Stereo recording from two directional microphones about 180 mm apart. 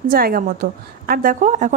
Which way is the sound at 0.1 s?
55° right (ahead or behind).